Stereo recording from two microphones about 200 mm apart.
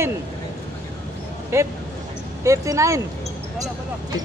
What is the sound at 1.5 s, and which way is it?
Speech, 15° right (ahead or behind).